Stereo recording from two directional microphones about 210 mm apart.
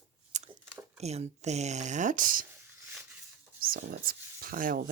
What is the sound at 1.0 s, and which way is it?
Speech, 30° right (ahead or behind).